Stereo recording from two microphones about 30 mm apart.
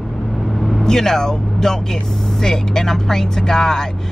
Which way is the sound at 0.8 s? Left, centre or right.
Centre.